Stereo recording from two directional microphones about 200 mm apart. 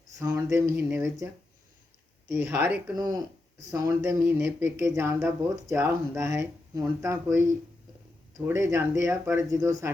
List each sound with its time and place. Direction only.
0.2 s speech: 15° right (ahead or behind)
2.3 s speech: 10° right (ahead or behind)
2.9 s speech: 20° right (ahead or behind)
8.4 s speech: 15° right (ahead or behind)